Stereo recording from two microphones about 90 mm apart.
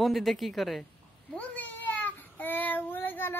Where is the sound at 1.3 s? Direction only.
15° left (ahead or behind).